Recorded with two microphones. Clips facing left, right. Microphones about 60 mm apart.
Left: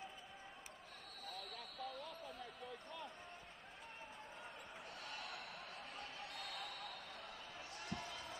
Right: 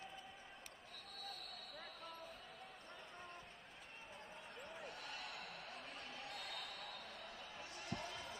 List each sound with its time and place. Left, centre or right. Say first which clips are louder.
2.0 s basketball bounce: left 3 dB; left
5.0 s a sound: left 1 dB; centre
6.4 s basketball bounce: left 1 dB; centre